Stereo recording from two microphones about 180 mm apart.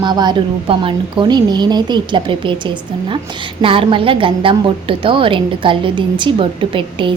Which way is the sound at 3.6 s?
30° right (ahead or behind).